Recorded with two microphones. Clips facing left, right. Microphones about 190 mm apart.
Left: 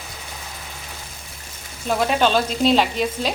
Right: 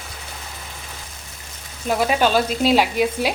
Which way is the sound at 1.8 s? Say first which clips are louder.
Even; 5° right (ahead or behind).